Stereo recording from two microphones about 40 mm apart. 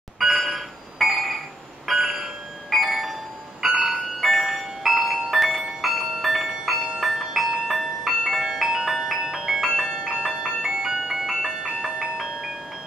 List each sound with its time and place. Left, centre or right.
0.2 s music: centre
2.0 s a sound: centre
2.7 s bell: centre
3.6 s music: centre
9.4 s ice cream truck: centre